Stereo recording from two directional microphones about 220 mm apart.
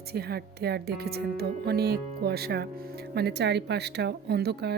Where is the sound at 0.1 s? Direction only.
45° right (ahead or behind).